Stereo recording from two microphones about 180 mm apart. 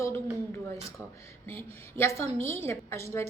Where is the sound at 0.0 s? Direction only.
15° left (ahead or behind).